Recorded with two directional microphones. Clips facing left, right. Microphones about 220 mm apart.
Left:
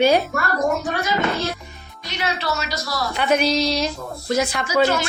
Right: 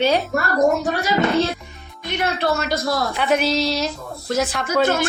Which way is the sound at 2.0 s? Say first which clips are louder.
Right 4 dB; 55° right (ahead or behind).